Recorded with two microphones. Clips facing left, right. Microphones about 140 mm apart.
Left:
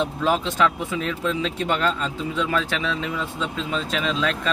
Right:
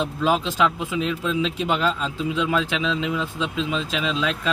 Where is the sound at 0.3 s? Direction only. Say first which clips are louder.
Right 1 dB; 10° right (ahead or behind).